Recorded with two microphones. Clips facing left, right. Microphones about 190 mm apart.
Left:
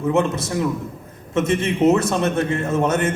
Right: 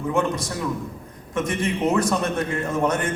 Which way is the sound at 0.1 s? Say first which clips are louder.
Left 3 dB; 25° left (ahead or behind).